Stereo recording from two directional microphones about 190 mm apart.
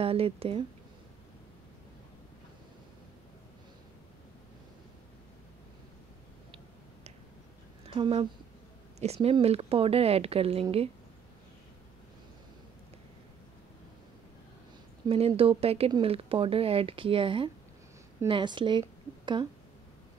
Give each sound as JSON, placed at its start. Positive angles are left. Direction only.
{"t": 0.0, "sound": "speech", "side_deg": -30}
{"t": 7.8, "sound": "speech", "side_deg": -30}
{"t": 15.0, "sound": "a woman's voice", "side_deg": -30}